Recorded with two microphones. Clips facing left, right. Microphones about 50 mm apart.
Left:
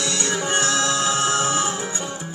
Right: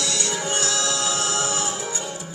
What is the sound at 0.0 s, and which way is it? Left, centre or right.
Music, left.